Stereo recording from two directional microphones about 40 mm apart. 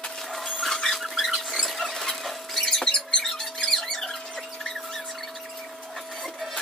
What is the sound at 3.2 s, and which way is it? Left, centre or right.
Squeak, centre.